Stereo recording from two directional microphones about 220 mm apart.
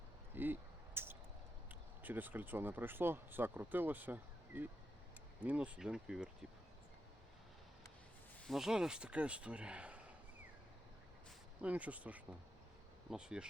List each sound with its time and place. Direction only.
0.3 s a sound: 10° right (ahead or behind)
2.0 s speech: 10° right (ahead or behind)
8.4 s speech: centre (ahead or behind)
11.6 s speech: 5° right (ahead or behind)